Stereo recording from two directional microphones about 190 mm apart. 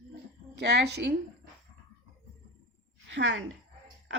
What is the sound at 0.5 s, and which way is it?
Speech, 65° right (ahead or behind).